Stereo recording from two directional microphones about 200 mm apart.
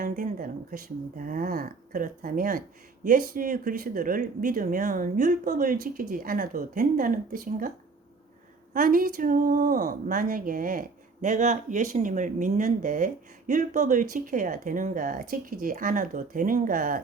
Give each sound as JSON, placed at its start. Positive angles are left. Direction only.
{"t": 0.0, "sound": "speech", "side_deg": -45}
{"t": 8.7, "sound": "speech", "side_deg": -45}